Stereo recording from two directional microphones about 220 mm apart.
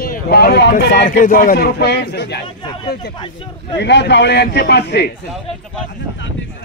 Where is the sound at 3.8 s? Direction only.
50° left (ahead or behind).